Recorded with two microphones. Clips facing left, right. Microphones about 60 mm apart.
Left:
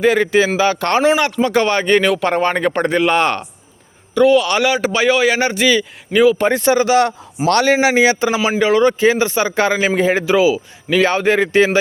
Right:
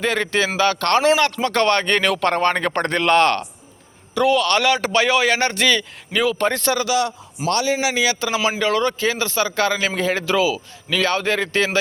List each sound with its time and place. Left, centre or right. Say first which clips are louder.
0.0 s a man's voice: left 7 dB; centre
6.8 s a man's voice: left 6 dB; left
7.4 s a man's voice: left 6 dB; left
7.8 s a man's voice: left 7 dB; left
8.4 s a man's voice: left 4 dB; centre